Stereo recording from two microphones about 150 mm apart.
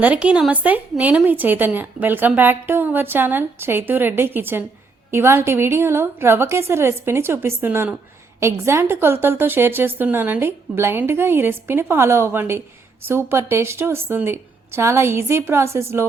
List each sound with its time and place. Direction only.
0.0 s speech: 10° right (ahead or behind)